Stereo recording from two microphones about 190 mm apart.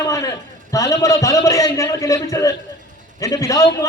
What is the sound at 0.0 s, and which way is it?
A man's voice, 15° left (ahead or behind).